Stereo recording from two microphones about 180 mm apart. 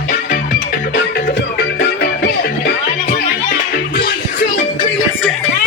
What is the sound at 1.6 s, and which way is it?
Music, 65° left (ahead or behind).